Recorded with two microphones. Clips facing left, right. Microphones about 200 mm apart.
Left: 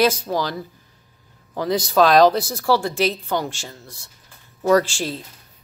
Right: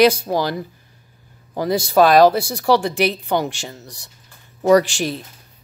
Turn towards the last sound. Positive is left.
turn(degrees=-15)  # may be behind; listen again after turning